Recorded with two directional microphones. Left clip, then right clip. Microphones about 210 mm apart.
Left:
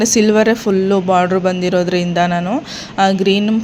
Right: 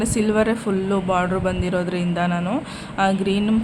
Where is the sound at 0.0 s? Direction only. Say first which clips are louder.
Left 8 dB; 25° left (ahead or behind).